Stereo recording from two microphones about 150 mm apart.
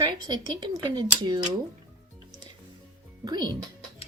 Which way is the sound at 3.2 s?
30° right (ahead or behind).